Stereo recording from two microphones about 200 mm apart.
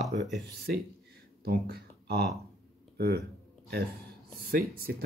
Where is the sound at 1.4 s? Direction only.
50° right (ahead or behind).